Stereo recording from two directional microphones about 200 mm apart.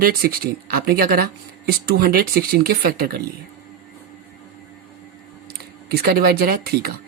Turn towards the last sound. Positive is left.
turn(degrees=-50)  # may be behind; listen again after turning